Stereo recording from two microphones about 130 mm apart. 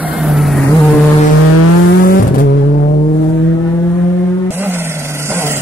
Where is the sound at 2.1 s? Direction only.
90° left.